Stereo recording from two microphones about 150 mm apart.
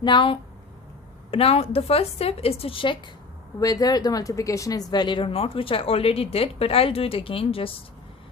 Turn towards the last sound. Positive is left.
turn(degrees=40)  # may be behind; listen again after turning